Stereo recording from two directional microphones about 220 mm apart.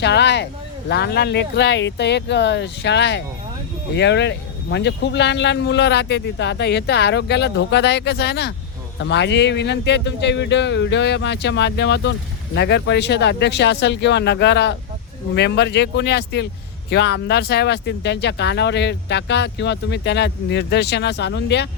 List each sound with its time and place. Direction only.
0.0 s speech: 50° left (ahead or behind)